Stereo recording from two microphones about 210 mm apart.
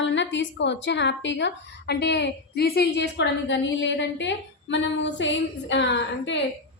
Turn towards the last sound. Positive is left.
turn(degrees=55)  # may be behind; listen again after turning